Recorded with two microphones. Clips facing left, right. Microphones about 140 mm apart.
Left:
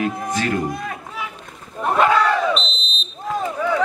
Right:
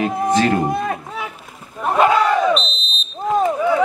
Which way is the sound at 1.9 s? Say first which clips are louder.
Right 2 dB; 15° right (ahead or behind).